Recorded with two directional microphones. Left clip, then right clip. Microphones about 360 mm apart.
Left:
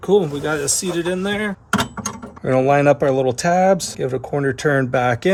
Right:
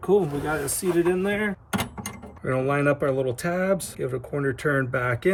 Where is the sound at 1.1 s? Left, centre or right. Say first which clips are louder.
Left 3 dB; centre.